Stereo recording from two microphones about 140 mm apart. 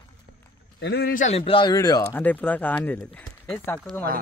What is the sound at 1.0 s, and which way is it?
Speech, 90° left.